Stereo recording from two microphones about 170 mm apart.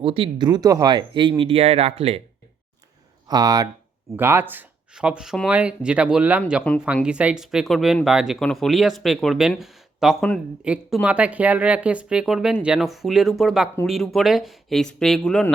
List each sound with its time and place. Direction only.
0.0 s speech: 30° right (ahead or behind)
3.2 s speech: 25° right (ahead or behind); by 15.5 s 5° left (ahead or behind)